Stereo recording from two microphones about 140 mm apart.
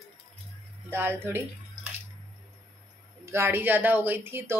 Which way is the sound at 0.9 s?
15° right (ahead or behind).